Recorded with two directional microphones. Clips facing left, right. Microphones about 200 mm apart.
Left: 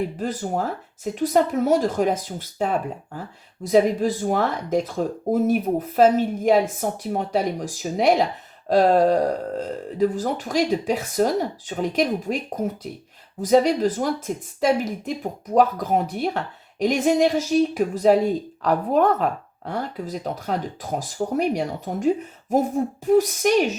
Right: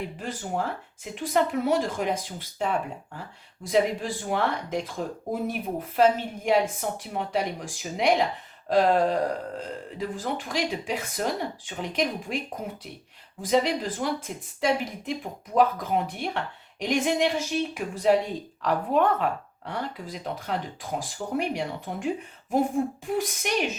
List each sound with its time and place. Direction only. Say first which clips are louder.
0.2 s speech: left 5 dB; 40° left (ahead or behind)
3.6 s speech: left 6 dB; 45° left (ahead or behind)